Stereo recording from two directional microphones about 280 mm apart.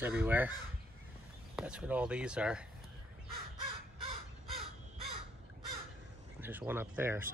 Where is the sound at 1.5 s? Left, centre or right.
Centre.